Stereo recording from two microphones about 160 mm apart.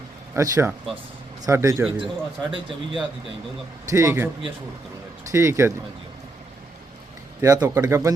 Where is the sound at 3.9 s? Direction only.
20° right (ahead or behind).